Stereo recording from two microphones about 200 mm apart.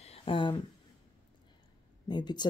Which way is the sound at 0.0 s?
30° left (ahead or behind).